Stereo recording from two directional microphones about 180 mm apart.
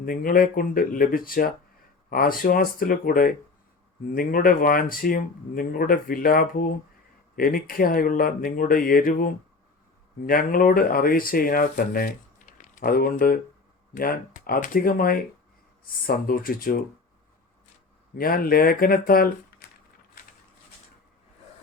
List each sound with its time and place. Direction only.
0.0 s speech: 55° left (ahead or behind)
18.2 s speech: 55° left (ahead or behind)